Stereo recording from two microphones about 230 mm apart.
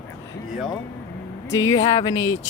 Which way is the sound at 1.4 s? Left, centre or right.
Left.